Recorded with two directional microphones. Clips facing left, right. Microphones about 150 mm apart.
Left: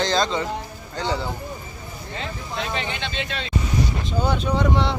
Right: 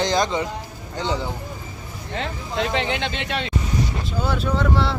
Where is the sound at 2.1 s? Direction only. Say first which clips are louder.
Right 5 dB; 75° right (ahead or behind).